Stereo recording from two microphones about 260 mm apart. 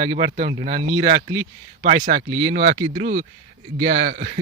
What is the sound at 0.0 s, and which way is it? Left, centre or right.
A man's voice, right.